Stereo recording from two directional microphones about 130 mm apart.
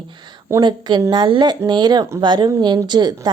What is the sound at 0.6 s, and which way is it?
A woman's voice, 35° right (ahead or behind).